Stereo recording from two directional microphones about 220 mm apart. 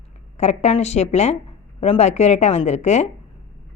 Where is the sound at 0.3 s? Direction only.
30° left (ahead or behind).